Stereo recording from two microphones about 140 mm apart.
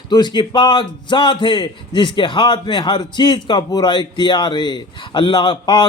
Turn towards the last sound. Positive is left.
turn(degrees=35)  # may be behind; listen again after turning